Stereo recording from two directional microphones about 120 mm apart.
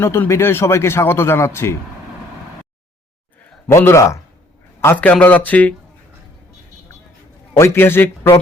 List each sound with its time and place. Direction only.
0.0 s speech: 20° left (ahead or behind)
3.7 s a man's voice: 25° left (ahead or behind)
7.6 s speech: 20° left (ahead or behind)